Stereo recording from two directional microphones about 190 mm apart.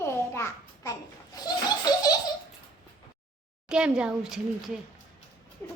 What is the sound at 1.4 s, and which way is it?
Laughter, 20° left (ahead or behind).